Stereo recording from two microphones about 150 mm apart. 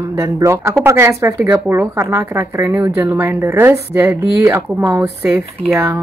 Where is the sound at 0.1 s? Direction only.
20° right (ahead or behind).